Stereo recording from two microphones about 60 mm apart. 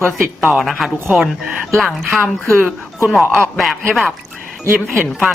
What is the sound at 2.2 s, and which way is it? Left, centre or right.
Speech, centre.